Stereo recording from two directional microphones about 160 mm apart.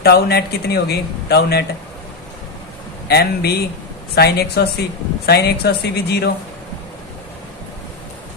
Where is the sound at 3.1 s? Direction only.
90° left.